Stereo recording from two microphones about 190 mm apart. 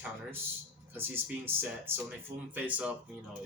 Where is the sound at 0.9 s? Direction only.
10° right (ahead or behind).